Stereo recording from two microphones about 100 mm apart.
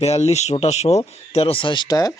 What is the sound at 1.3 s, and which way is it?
Speech, 65° left (ahead or behind).